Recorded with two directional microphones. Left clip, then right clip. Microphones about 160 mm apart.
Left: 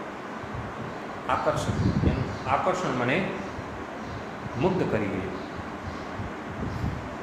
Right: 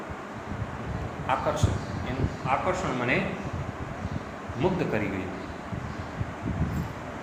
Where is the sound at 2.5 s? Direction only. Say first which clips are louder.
Left 2 dB; 10° right (ahead or behind).